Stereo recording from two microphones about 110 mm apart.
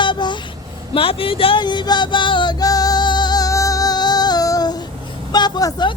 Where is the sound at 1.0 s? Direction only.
55° left (ahead or behind); by 4.9 s 40° left (ahead or behind).